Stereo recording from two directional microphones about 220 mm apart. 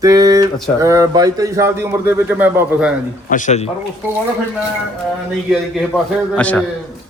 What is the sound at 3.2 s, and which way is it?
Speech, 35° left (ahead or behind).